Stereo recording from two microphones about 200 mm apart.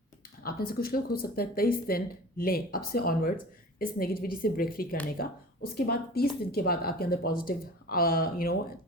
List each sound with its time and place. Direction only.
0.4 s speech: 50° left (ahead or behind)